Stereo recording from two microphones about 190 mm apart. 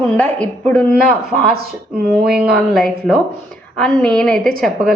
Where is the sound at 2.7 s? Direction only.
5° left (ahead or behind).